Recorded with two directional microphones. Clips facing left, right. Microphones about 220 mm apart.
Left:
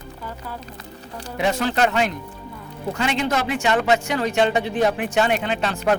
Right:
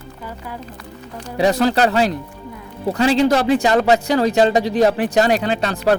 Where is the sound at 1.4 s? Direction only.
35° right (ahead or behind).